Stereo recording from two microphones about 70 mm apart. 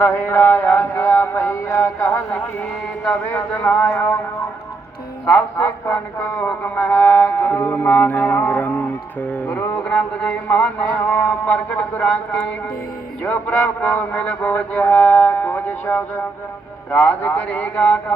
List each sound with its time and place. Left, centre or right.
0.0 s mantra: left
3.3 s speech: left
3.8 s a sound: left
5.2 s speech: left
13.9 s speech: centre